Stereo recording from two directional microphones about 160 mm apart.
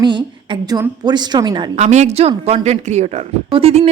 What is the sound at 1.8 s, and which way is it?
A woman's voice, 45° right (ahead or behind).